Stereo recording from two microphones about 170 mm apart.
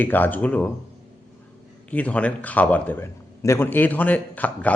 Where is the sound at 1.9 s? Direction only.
10° left (ahead or behind).